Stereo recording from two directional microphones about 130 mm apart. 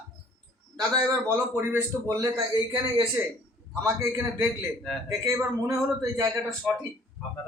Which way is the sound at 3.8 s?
20° right (ahead or behind).